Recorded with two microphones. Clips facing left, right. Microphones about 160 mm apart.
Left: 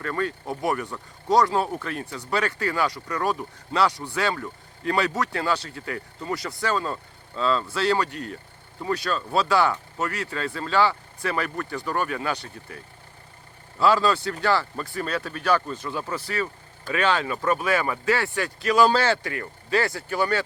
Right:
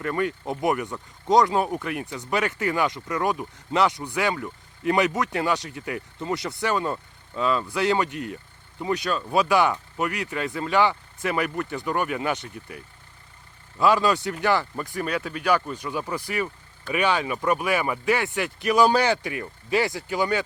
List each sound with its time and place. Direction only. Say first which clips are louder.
0.0 s speech: right 2 dB; 15° right (ahead or behind)